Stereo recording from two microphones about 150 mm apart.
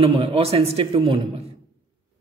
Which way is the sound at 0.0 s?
40° right (ahead or behind).